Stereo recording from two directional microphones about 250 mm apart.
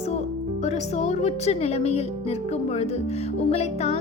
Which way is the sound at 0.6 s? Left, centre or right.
Left.